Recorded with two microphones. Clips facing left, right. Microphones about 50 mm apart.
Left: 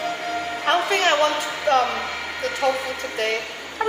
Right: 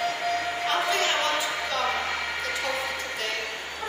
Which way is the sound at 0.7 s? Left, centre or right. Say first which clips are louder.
Left 7 dB; left.